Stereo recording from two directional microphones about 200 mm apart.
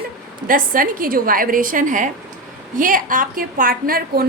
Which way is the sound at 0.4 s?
45° right (ahead or behind).